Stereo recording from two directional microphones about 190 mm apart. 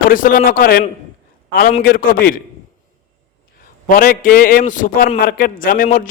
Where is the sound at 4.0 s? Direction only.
50° left (ahead or behind).